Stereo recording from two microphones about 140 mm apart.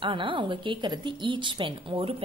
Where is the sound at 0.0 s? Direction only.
35° right (ahead or behind).